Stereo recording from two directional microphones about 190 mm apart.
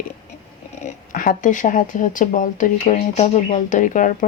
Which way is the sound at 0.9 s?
45° left (ahead or behind).